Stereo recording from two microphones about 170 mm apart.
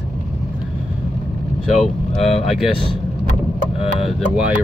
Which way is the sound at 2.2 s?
40° left (ahead or behind).